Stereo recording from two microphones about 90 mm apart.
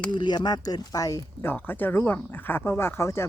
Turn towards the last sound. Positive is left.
turn(degrees=30)  # may be behind; listen again after turning